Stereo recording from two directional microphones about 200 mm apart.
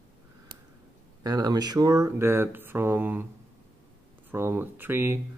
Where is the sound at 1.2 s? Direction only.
20° right (ahead or behind).